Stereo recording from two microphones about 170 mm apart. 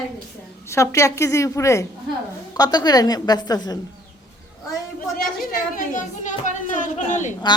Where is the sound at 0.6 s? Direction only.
15° left (ahead or behind).